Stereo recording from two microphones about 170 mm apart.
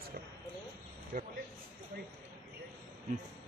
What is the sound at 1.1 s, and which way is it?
Speech, 55° right (ahead or behind).